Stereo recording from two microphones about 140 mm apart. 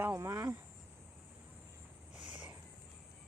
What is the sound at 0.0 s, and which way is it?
Speech, 20° right (ahead or behind).